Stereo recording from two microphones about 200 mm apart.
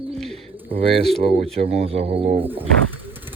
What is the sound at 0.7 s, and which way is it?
Speech, 25° right (ahead or behind).